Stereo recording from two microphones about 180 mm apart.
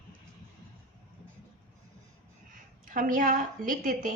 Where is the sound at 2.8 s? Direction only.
50° right (ahead or behind).